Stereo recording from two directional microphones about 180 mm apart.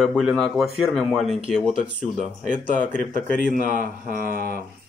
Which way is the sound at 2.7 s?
45° right (ahead or behind).